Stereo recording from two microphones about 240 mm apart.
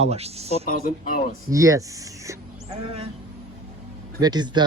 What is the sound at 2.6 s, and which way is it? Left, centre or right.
Speech, right.